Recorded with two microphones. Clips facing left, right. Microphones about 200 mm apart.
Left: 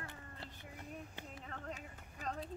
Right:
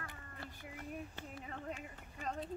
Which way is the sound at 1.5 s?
10° right (ahead or behind).